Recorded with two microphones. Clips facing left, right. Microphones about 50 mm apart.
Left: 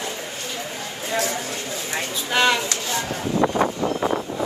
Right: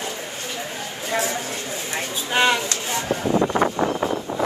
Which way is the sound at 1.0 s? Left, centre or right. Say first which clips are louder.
Even; right.